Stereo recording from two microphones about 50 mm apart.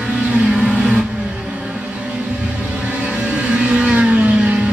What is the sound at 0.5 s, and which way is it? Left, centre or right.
Vehicle, centre.